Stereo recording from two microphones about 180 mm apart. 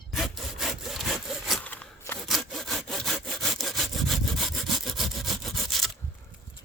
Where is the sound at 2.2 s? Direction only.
Centre (ahead or behind).